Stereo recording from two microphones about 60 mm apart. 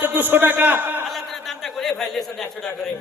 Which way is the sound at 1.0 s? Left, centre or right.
Centre.